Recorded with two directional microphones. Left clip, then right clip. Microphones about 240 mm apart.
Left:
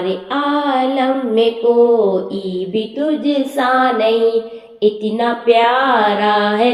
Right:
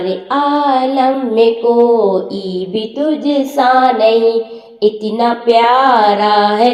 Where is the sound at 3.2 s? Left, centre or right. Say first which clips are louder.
Right 6 dB; centre.